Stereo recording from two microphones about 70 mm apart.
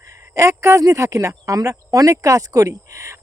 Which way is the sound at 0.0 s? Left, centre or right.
Right.